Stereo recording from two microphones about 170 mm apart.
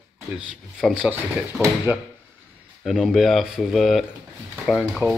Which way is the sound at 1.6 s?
10° right (ahead or behind).